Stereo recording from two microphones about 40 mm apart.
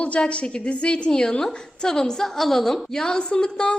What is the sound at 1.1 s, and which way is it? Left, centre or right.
A woman's voice, centre.